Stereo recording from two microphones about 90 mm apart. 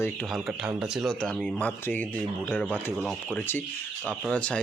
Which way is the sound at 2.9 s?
5° right (ahead or behind).